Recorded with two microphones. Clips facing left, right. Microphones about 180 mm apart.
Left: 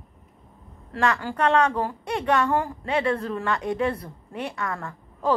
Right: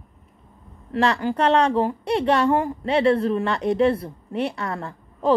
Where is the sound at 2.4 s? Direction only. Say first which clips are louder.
Right 4 dB; 15° right (ahead or behind).